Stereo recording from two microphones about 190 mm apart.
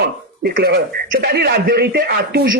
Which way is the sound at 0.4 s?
55° right (ahead or behind).